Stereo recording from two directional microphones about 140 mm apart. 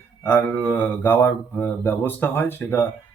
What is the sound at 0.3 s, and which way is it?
Speech, 15° left (ahead or behind).